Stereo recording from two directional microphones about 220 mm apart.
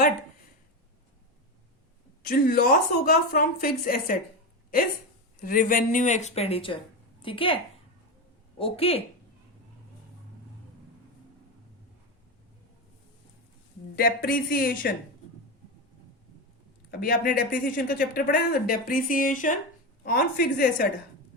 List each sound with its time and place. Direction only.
2.2 s speech: 40° left (ahead or behind)
5.4 s a woman's voice: 40° left (ahead or behind)
13.9 s speech: 45° left (ahead or behind)
16.9 s speech: 40° left (ahead or behind)